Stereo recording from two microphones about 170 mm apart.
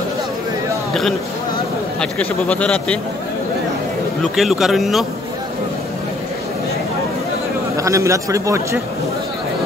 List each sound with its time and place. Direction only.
2.0 s a man's voice: 5° left (ahead or behind)
4.2 s speech: centre (ahead or behind)
7.7 s a man's voice: 20° right (ahead or behind)